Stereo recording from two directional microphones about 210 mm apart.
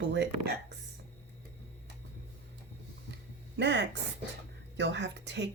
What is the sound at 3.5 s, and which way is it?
A woman's voice, 55° right (ahead or behind).